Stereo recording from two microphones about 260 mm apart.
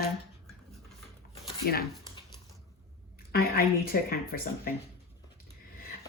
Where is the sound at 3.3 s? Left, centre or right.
Left.